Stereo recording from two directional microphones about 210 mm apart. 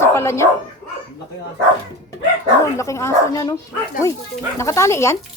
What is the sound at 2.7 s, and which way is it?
Speech, 15° left (ahead or behind).